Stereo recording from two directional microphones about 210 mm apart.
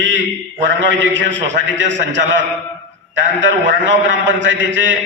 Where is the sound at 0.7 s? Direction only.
60° right (ahead or behind).